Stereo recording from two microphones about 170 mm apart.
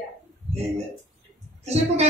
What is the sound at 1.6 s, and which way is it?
Speech, 40° right (ahead or behind).